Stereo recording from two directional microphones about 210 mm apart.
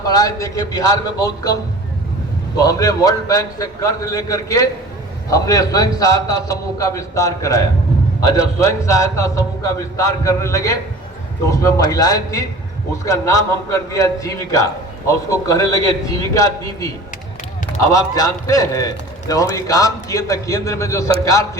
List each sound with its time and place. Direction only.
0.0 s a man's voice: 15° left (ahead or behind)
2.6 s a man's voice: 15° left (ahead or behind)
17.9 s a man's voice: 15° left (ahead or behind)